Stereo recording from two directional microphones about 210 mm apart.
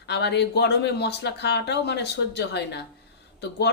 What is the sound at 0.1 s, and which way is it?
Speech, 55° left (ahead or behind).